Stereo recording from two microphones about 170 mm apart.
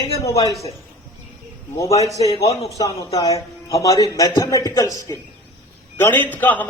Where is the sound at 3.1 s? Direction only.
20° left (ahead or behind).